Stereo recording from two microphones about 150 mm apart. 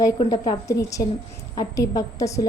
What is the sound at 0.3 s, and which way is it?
A woman's voice, 25° left (ahead or behind).